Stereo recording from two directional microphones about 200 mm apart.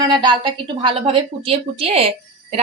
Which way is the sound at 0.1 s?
20° right (ahead or behind).